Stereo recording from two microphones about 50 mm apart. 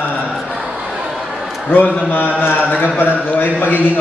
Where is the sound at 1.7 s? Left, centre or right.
Left.